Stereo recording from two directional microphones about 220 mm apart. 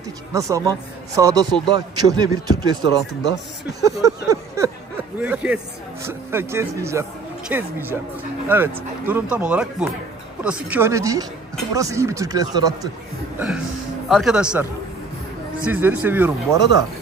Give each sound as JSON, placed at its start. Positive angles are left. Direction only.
{"t": 0.3, "sound": "a man's voice", "side_deg": -15}
{"t": 14.0, "sound": "a man's voice", "side_deg": 0}